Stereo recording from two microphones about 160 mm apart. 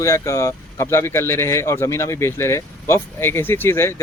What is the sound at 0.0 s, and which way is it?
Speech, 20° left (ahead or behind).